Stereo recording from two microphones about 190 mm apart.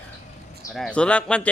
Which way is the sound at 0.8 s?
5° left (ahead or behind).